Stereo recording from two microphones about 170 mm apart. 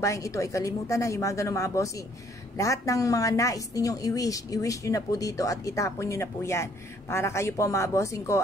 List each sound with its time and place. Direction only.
0.0 s a woman's voice: 20° left (ahead or behind)